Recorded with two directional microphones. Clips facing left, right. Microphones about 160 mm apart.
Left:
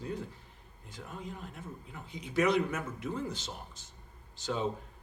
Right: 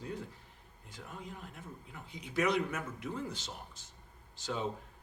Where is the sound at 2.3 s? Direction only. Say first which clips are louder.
Left 3 dB; 25° left (ahead or behind).